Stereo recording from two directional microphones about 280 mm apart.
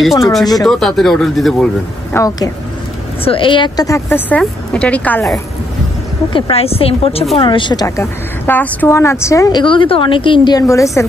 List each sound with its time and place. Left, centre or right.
0.7 s speech: centre
2.1 s a woman's voice: centre
6.3 s a woman's voice: left